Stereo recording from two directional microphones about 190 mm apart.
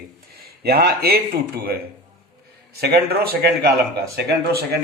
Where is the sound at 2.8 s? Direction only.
55° right (ahead or behind).